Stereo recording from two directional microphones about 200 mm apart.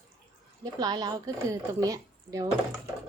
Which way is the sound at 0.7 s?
20° right (ahead or behind).